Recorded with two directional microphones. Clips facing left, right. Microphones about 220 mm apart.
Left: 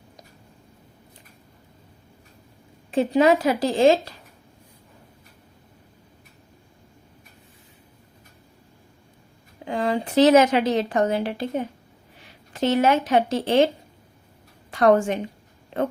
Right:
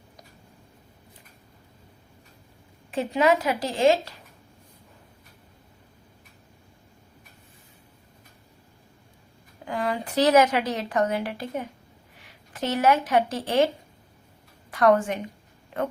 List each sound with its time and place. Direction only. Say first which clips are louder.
2.9 s a woman's voice: left 4 dB; 30° left (ahead or behind)
9.6 s speech: left 4 dB; 25° left (ahead or behind)
14.7 s a woman's voice: left 3 dB; 25° left (ahead or behind)